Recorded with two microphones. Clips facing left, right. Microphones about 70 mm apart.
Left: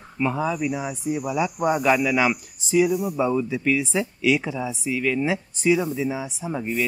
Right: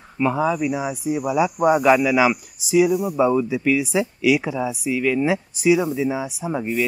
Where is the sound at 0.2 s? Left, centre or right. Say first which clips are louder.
Right 4 dB; centre.